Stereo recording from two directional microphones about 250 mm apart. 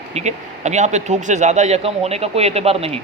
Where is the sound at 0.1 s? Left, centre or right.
Right.